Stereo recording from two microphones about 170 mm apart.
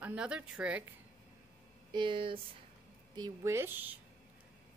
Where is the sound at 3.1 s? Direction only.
20° right (ahead or behind).